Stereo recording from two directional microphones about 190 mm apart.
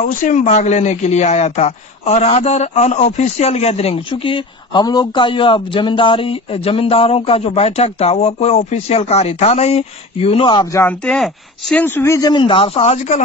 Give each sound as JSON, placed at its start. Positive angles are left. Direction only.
{"t": 0.0, "sound": "speech", "side_deg": 40}